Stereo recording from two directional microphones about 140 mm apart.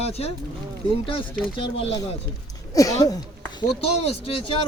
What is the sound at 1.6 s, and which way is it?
Speech, 40° left (ahead or behind).